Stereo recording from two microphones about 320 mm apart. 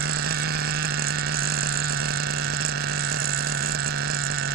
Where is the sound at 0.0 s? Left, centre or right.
Right.